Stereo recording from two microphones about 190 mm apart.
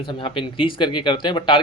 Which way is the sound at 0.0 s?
25° left (ahead or behind).